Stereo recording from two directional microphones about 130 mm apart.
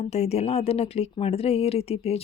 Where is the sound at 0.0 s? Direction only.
55° left (ahead or behind).